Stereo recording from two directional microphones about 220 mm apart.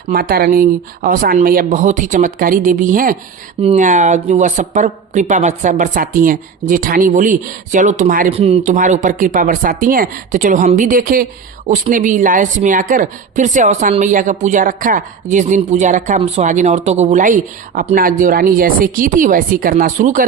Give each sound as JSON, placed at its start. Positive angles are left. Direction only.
{"t": 0.1, "sound": "speech", "side_deg": -40}